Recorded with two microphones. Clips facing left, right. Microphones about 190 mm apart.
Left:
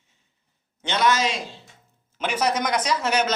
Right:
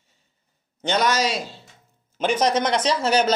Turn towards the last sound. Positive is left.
turn(degrees=-30)  # may be behind; listen again after turning